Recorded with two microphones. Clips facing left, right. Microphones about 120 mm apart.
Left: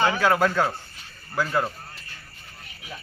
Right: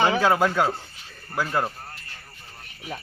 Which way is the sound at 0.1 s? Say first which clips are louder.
Right 1 dB; 20° right (ahead or behind).